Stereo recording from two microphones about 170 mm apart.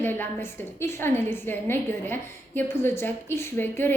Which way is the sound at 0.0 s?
10° left (ahead or behind).